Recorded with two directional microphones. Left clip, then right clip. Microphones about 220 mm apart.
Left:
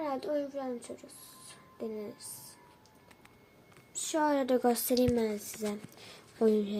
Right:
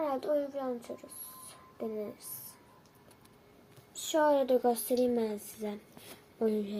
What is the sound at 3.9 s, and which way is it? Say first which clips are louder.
Speech: right 3 dB; 20° left (ahead or behind).